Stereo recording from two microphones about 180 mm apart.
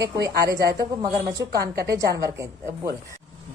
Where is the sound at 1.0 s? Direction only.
20° right (ahead or behind).